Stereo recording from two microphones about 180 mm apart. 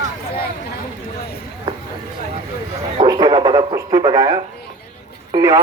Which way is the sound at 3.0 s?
25° right (ahead or behind).